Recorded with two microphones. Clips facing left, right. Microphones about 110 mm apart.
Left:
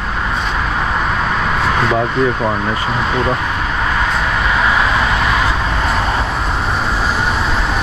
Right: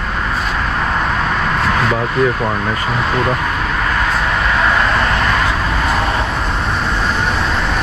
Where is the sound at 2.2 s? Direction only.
Centre (ahead or behind).